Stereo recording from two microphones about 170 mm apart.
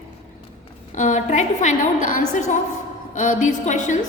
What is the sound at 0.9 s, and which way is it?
A woman's voice, 45° left (ahead or behind).